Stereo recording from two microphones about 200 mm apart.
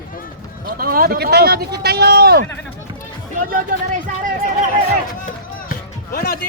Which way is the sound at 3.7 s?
45° right (ahead or behind).